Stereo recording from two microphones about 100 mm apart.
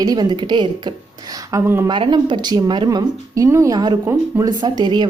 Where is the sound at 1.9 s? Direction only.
50° right (ahead or behind).